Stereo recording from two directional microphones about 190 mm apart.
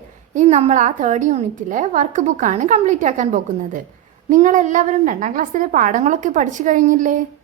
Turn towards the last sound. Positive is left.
turn(degrees=-40)  # may be behind; listen again after turning